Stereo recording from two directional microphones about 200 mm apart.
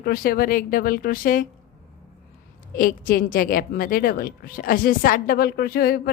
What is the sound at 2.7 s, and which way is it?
A woman's voice, 45° left (ahead or behind).